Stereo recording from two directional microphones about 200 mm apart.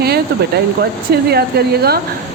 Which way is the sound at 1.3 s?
50° right (ahead or behind).